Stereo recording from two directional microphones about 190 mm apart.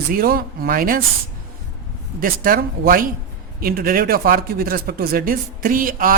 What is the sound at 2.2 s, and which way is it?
Speech, 50° right (ahead or behind).